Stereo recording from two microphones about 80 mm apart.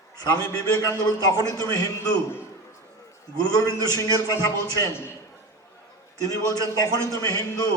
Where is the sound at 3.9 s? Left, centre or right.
Left.